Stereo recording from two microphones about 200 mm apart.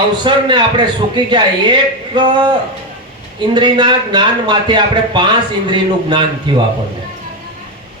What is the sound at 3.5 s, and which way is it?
A man's voice, 20° right (ahead or behind).